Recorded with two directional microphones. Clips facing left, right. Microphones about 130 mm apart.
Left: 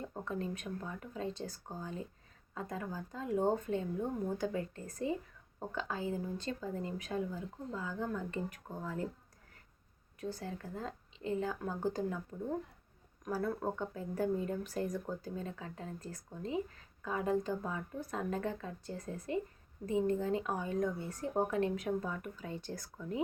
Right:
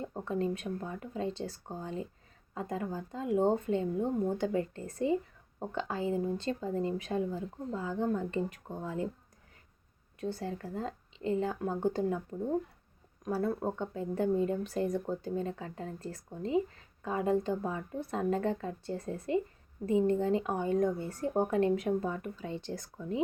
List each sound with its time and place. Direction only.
0.1 s speech: 25° right (ahead or behind)
10.2 s speech: 30° right (ahead or behind)
13.2 s speech: 25° right (ahead or behind)